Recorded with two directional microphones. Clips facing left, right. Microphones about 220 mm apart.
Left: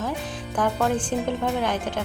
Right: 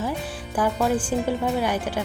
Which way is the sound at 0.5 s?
5° right (ahead or behind).